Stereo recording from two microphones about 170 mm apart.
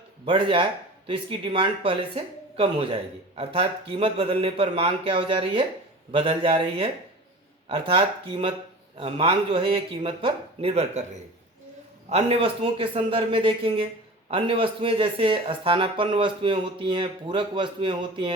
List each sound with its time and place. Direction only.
0.3 s speech: 30° right (ahead or behind)